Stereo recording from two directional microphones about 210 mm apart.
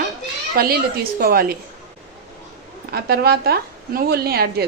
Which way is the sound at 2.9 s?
50° right (ahead or behind).